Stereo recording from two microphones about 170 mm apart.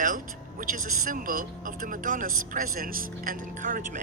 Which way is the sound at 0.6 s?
50° right (ahead or behind).